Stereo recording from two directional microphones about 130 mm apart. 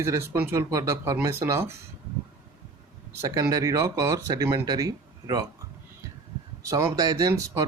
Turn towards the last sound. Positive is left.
turn(degrees=-25)  # may be behind; listen again after turning